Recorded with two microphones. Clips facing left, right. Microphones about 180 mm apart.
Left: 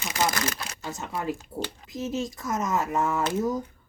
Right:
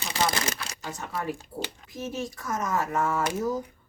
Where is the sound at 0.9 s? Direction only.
20° left (ahead or behind).